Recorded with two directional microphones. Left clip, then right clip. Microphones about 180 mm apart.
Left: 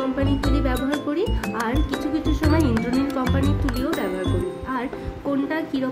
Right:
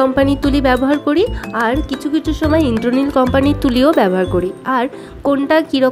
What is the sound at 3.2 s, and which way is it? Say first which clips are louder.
Speech: right 11 dB; 45° right (ahead or behind).